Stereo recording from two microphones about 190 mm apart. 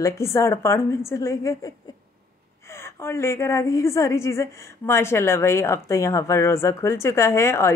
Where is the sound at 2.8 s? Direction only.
15° left (ahead or behind).